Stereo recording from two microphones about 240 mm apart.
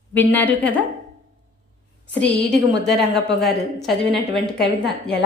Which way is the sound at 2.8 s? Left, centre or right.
Centre.